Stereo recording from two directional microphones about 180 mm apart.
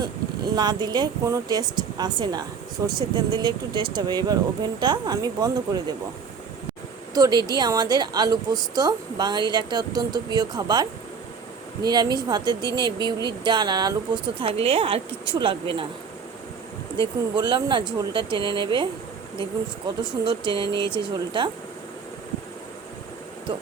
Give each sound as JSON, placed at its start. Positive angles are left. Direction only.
{"t": 0.0, "sound": "speech", "side_deg": -25}
{"t": 7.1, "sound": "speech", "side_deg": -20}
{"t": 17.3, "sound": "speech", "side_deg": -25}
{"t": 20.2, "sound": "speech", "side_deg": -25}